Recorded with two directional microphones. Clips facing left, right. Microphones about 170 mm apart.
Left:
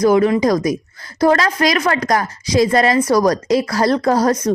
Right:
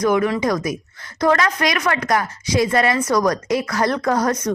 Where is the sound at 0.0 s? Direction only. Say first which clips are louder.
Left 5 dB; 30° left (ahead or behind).